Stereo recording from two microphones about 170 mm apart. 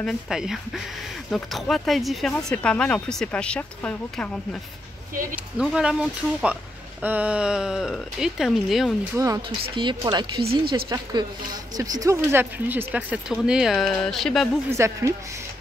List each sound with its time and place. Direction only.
0.0 s speech: centre (ahead or behind)
5.3 s speech: 5° right (ahead or behind)
9.1 s speech: 20° right (ahead or behind)
10.4 s speech: 65° right (ahead or behind)
10.9 s speech: 20° right (ahead or behind); by 14.6 s centre (ahead or behind)
14.7 s speech: 15° right (ahead or behind)